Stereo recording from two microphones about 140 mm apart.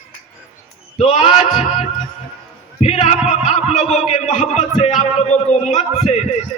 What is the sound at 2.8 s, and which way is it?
A man's voice, 45° left (ahead or behind).